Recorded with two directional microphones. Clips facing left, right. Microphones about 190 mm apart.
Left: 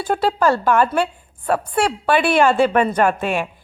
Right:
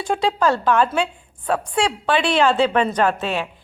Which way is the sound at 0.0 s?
5° left (ahead or behind).